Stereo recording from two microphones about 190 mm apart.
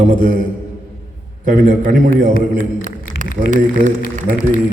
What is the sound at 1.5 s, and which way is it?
Speech, 45° right (ahead or behind).